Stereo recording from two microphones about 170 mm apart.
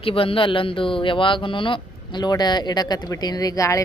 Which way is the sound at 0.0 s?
35° left (ahead or behind).